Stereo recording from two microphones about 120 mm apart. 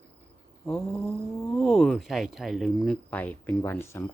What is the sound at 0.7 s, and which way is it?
Speech, 5° left (ahead or behind).